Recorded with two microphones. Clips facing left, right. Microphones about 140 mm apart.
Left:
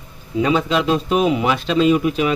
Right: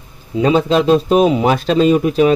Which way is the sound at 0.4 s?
35° right (ahead or behind).